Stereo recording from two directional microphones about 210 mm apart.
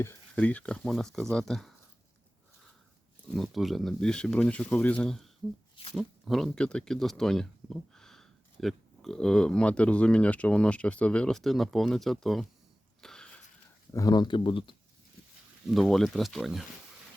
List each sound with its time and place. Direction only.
0.0 s speech: 10° left (ahead or behind)
3.3 s speech: centre (ahead or behind)
13.0 s a sound: 5° left (ahead or behind)
13.9 s speech: 20° left (ahead or behind)
15.6 s speech: centre (ahead or behind)